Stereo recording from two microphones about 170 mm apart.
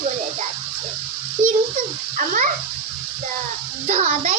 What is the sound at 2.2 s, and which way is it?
Speech, 45° right (ahead or behind).